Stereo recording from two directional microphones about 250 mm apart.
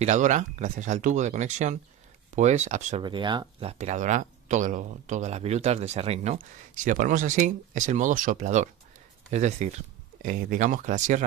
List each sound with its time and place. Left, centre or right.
0.0 s speech: right